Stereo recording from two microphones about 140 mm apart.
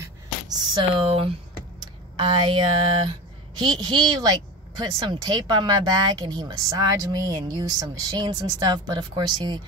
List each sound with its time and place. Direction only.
0.9 s speech: 40° right (ahead or behind)